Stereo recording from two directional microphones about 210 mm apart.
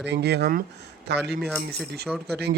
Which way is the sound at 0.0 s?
55° right (ahead or behind).